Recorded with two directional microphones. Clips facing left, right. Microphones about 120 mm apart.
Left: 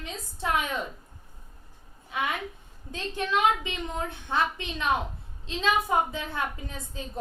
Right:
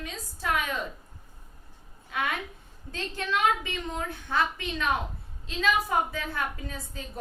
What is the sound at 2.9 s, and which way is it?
A woman's voice, 20° left (ahead or behind).